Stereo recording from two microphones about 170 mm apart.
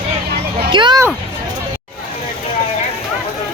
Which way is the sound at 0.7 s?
25° right (ahead or behind).